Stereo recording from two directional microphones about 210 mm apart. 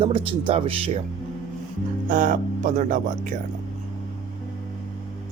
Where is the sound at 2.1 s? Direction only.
40° right (ahead or behind).